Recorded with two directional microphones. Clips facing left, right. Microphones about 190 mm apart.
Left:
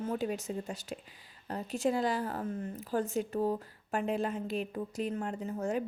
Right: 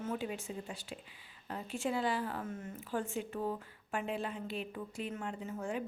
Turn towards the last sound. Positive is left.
turn(degrees=40)  # may be behind; listen again after turning